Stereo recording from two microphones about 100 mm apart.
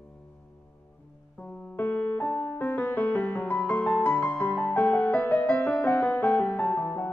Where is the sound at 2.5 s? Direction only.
20° left (ahead or behind).